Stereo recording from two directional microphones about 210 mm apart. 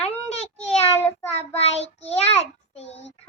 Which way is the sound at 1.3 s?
30° left (ahead or behind).